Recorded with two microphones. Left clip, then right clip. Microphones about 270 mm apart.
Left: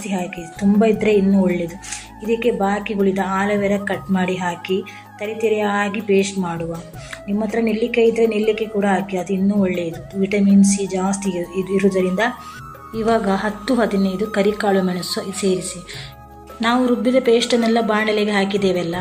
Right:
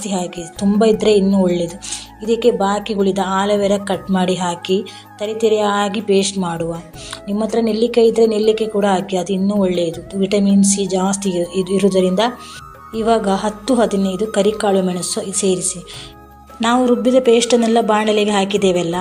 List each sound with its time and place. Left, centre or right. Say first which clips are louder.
0.0 s a woman's voice: right 3 dB; right
16.6 s a woman's voice: right 3 dB; centre